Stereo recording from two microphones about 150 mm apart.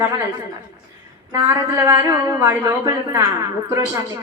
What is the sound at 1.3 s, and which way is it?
A woman's voice, 20° right (ahead or behind).